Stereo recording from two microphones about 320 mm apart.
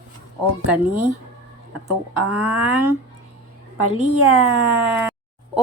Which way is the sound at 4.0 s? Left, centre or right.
Right.